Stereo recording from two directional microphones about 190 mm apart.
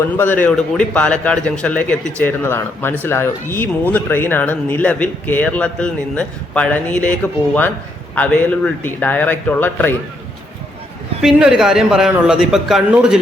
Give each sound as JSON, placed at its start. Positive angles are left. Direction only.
{"t": 0.0, "sound": "speech", "side_deg": 10}
{"t": 11.2, "sound": "a man's voice", "side_deg": -5}